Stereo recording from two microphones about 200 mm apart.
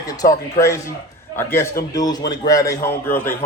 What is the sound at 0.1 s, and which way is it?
Speech, 20° left (ahead or behind).